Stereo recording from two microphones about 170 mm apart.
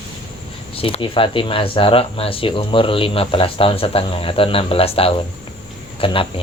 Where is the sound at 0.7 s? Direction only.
35° left (ahead or behind).